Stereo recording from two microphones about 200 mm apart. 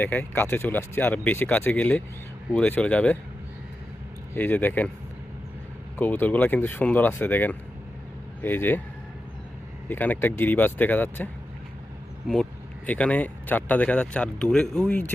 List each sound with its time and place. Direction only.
0.0 s speech: 10° left (ahead or behind)
4.4 s speech: 10° left (ahead or behind)
6.0 s speech: 10° left (ahead or behind)
9.9 s speech: 10° left (ahead or behind)
12.3 s speech: 5° left (ahead or behind)